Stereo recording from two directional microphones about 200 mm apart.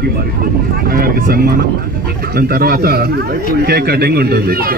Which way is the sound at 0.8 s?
50° right (ahead or behind).